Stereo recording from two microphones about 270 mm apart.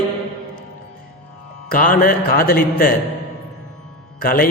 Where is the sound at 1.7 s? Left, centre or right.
Left.